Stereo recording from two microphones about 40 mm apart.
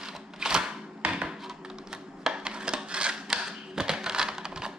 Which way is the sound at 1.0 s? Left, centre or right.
Right.